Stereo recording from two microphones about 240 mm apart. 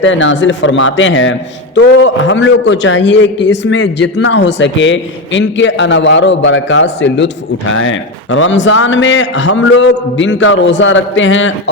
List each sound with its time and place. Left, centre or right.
0.0 s a man's voice: left